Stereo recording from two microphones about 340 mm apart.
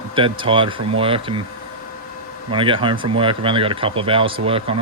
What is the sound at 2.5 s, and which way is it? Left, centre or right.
Speech, centre.